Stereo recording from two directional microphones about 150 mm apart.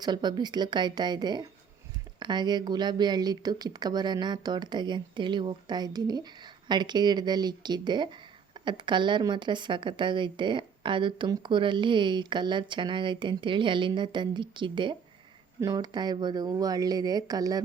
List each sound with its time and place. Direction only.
0.0 s a woman's voice: 30° right (ahead or behind)